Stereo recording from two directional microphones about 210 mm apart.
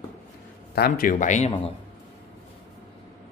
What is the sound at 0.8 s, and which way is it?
Speech, 40° left (ahead or behind).